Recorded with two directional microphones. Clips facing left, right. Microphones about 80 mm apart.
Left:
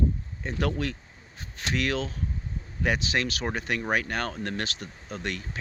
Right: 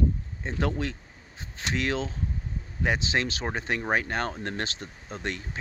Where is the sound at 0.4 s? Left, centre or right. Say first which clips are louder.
Even; right.